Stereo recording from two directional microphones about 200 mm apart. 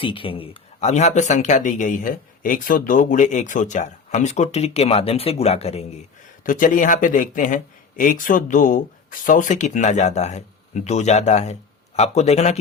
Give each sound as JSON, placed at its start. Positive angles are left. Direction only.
{"t": 0.0, "sound": "speech", "side_deg": 25}
{"t": 6.4, "sound": "speech", "side_deg": 40}